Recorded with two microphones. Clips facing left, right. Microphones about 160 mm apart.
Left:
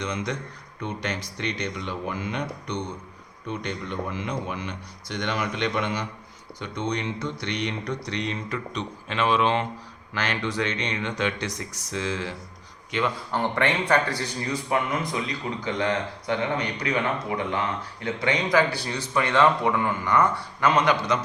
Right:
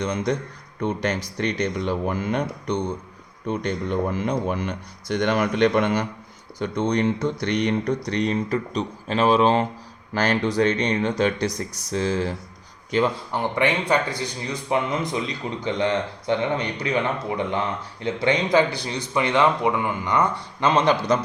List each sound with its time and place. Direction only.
0.0 s speech: 40° right (ahead or behind)
13.3 s speech: 15° right (ahead or behind)